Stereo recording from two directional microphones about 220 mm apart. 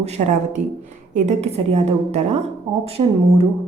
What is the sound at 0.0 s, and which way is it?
A woman's voice, 30° right (ahead or behind).